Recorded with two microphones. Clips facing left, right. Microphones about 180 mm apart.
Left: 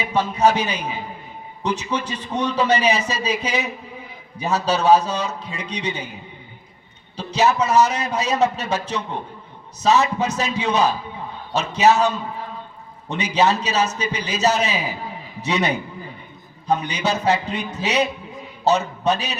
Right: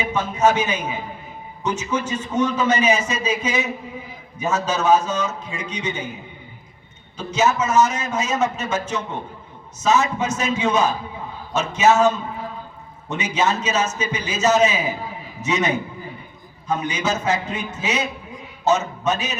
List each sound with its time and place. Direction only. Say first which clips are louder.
0.0 s a man's voice: left 1 dB; 35° left (ahead or behind)
7.2 s a man's voice: left 1 dB; 35° left (ahead or behind)